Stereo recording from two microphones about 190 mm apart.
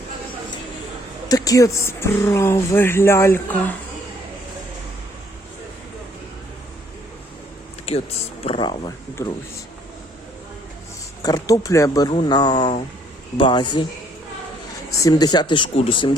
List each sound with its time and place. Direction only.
1.3 s speech: 20° left (ahead or behind)
7.9 s speech: 30° left (ahead or behind)
9.2 s speech: 15° left (ahead or behind)
11.2 s speech: 20° left (ahead or behind)
14.9 s speech: 20° left (ahead or behind)